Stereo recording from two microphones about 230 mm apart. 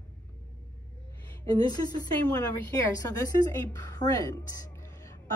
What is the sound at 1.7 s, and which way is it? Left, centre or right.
A woman's voice, centre.